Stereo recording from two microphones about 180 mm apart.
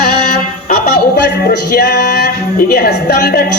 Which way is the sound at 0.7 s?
55° left (ahead or behind).